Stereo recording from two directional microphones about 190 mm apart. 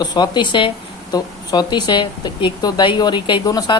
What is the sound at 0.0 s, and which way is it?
A woman's voice, 20° left (ahead or behind).